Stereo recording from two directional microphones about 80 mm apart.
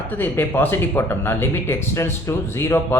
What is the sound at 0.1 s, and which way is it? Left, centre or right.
Speech, left.